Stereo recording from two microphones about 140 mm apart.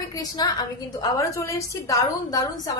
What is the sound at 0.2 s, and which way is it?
A woman's voice, 30° left (ahead or behind).